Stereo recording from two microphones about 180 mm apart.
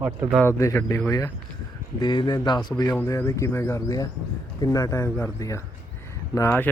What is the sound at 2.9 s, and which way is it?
Speech, 10° left (ahead or behind).